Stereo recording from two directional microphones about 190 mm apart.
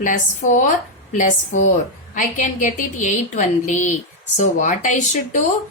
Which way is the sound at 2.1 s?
40° left (ahead or behind).